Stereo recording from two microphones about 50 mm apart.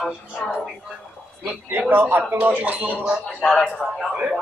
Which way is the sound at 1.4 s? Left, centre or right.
Right.